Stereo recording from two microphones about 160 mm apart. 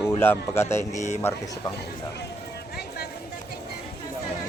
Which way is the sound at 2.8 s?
90° left.